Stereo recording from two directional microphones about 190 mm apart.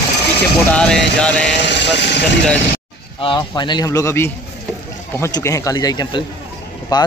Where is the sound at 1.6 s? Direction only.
65° left (ahead or behind).